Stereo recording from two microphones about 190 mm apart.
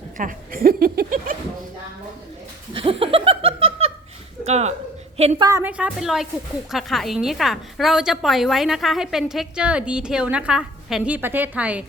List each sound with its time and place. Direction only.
0.2 s speech: 45° right (ahead or behind)
2.7 s laughter: 30° right (ahead or behind)
4.4 s a woman's voice: 35° right (ahead or behind)
5.5 s a woman's voice: 10° right (ahead or behind)